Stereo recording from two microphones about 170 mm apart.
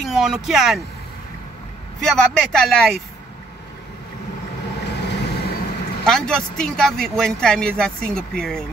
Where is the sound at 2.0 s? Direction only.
5° left (ahead or behind).